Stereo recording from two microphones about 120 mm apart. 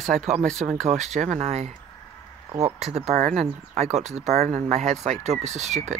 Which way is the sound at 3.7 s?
70° right (ahead or behind).